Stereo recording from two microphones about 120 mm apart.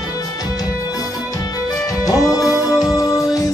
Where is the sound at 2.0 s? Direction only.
30° left (ahead or behind).